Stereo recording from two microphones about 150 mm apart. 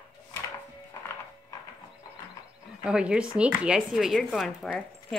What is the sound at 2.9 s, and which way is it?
Speech, 5° right (ahead or behind).